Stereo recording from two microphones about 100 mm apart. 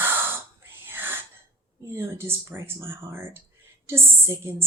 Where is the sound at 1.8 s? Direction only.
25° right (ahead or behind).